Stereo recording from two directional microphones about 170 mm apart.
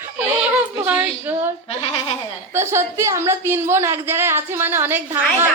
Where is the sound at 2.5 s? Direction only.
15° right (ahead or behind).